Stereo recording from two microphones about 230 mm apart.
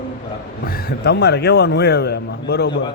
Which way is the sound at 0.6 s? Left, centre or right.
Left.